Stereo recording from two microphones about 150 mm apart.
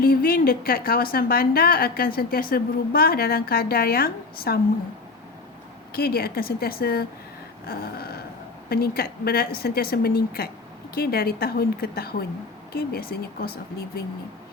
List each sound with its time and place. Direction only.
0.0 s a woman's voice: 85° left
5.9 s a woman's voice: 90° left
7.7 s a sound: 90° left
8.7 s a woman's voice: 90° left